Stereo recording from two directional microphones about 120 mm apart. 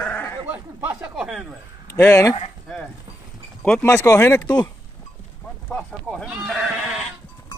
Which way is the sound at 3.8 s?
25° left (ahead or behind).